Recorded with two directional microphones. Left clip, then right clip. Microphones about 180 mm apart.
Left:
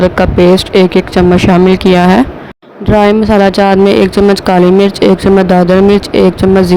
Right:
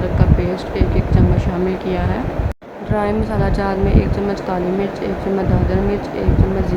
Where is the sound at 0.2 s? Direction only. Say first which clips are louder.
Left 14 dB; 60° left (ahead or behind).